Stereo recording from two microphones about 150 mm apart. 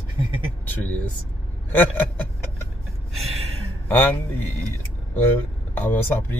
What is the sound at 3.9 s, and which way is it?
Speech, 15° left (ahead or behind).